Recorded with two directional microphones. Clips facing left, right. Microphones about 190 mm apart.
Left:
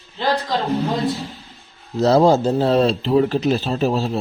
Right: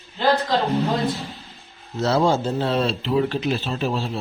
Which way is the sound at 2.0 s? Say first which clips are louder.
Left 6 dB; 40° left (ahead or behind).